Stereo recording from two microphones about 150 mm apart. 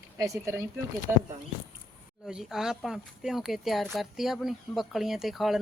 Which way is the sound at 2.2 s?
5° right (ahead or behind).